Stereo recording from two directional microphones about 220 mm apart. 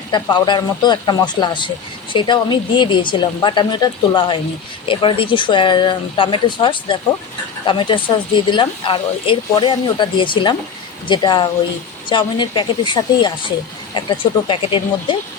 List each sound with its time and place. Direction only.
0.1 s speech: 20° left (ahead or behind)